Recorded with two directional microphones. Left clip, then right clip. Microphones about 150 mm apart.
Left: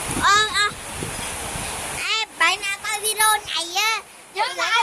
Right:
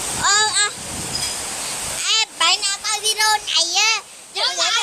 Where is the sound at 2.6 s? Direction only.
15° right (ahead or behind).